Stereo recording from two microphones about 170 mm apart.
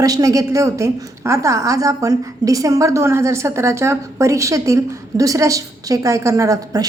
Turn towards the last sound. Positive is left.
turn(degrees=-20)  # may be behind; listen again after turning